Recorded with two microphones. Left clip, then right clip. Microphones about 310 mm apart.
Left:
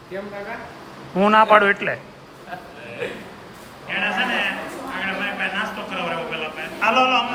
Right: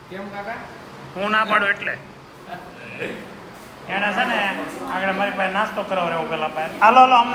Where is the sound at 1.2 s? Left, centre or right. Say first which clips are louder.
Left 5 dB; left.